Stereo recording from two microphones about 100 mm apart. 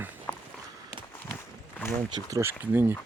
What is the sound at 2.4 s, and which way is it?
Speech, 20° right (ahead or behind).